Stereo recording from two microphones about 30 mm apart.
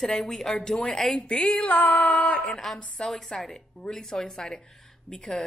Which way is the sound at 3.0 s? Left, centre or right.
Centre.